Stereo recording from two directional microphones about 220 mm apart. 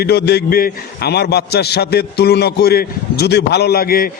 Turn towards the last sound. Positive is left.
turn(degrees=45)  # may be behind; listen again after turning